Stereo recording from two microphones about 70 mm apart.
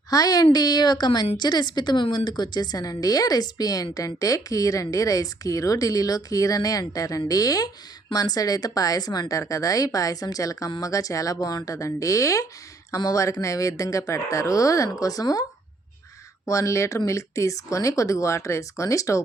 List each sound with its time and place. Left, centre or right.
0.1 s a woman's voice: left
16.5 s speech: left